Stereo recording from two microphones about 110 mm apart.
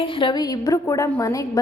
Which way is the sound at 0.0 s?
50° left (ahead or behind).